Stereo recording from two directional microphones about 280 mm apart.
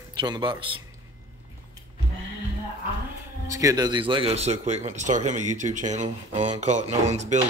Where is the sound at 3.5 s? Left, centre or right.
Centre.